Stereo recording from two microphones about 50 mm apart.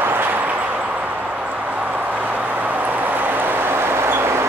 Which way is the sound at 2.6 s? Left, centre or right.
Right.